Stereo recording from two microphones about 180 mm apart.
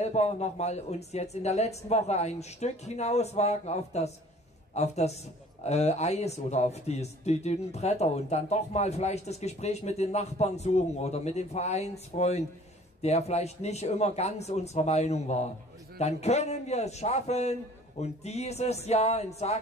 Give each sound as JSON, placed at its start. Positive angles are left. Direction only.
{"t": 0.0, "sound": "speech", "side_deg": 40}